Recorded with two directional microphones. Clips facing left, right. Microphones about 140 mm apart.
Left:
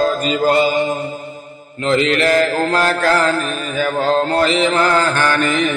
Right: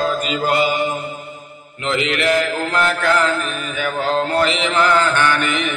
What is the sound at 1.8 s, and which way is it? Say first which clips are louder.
Mantra: left 4 dB; 35° left (ahead or behind).